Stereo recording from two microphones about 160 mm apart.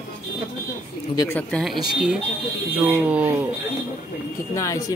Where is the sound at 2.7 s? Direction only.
10° right (ahead or behind).